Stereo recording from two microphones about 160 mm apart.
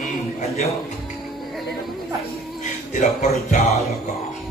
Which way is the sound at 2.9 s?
50° left (ahead or behind).